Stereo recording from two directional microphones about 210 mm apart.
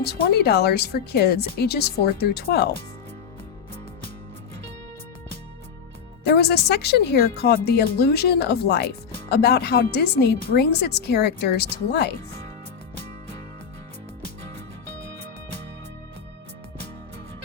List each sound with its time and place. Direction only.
0.0 s speech: 50° left (ahead or behind)
6.2 s speech: 50° left (ahead or behind)